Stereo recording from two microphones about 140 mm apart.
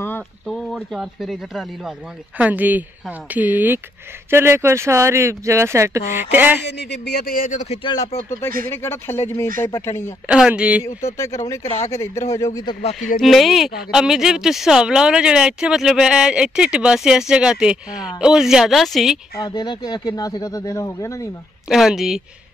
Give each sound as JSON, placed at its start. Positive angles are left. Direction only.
{"t": 0.5, "sound": "a sound", "side_deg": 5}
{"t": 0.7, "sound": "speech", "side_deg": -5}
{"t": 7.2, "sound": "speech", "side_deg": 85}
{"t": 7.7, "sound": "speech", "side_deg": 35}
{"t": 8.3, "sound": "speech", "side_deg": 20}
{"t": 10.2, "sound": "speech", "side_deg": -5}
{"t": 11.1, "sound": "speech", "side_deg": 20}
{"t": 11.6, "sound": "speech", "side_deg": 55}
{"t": 12.0, "sound": "speech", "side_deg": 20}
{"t": 13.2, "sound": "speech", "side_deg": 0}
{"t": 19.4, "sound": "speech", "side_deg": 30}
{"t": 21.6, "sound": "speech", "side_deg": 0}